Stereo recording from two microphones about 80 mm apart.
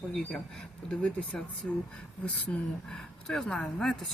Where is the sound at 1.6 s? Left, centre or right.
Centre.